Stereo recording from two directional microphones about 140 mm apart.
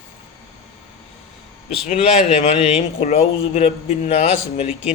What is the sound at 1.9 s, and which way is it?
A man's voice, 50° left (ahead or behind).